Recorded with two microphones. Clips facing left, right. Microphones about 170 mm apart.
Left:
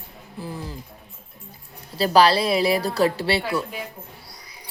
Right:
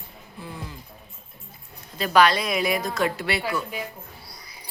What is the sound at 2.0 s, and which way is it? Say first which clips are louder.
A woman's voice: left 3 dB; 30° left (ahead or behind).